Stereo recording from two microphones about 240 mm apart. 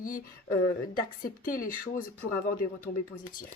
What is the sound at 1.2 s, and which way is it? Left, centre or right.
Speech, left.